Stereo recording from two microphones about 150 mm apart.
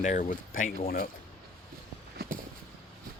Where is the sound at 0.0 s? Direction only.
60° left (ahead or behind).